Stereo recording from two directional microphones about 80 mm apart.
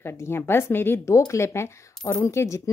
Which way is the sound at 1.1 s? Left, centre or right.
Left.